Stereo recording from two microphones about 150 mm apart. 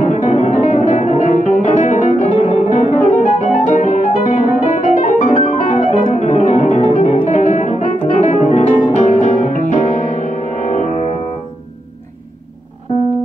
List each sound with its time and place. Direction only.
0.0 s music: 55° left (ahead or behind)